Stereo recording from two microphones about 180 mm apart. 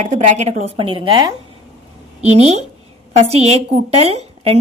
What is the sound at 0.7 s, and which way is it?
Speech, 30° right (ahead or behind).